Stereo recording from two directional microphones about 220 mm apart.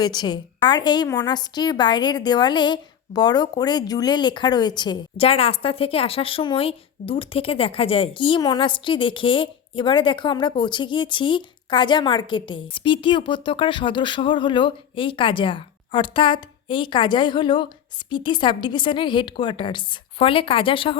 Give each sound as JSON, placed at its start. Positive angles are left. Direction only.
{"t": 0.0, "sound": "a woman's voice", "side_deg": 20}